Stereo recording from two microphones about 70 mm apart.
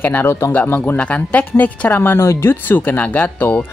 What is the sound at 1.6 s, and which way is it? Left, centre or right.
Speech, left.